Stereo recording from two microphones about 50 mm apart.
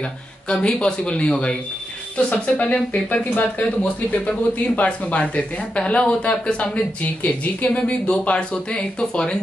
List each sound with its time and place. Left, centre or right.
0.5 s speech: centre